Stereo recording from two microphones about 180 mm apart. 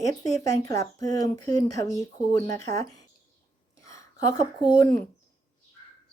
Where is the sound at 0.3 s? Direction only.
20° left (ahead or behind).